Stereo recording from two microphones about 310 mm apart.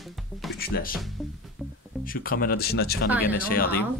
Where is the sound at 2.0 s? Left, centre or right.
Left.